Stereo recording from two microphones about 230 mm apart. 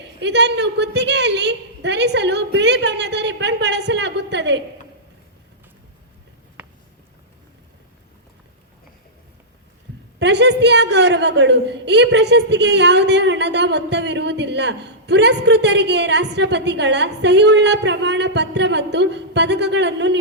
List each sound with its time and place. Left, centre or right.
0.2 s a woman's voice: right
10.2 s a woman's voice: right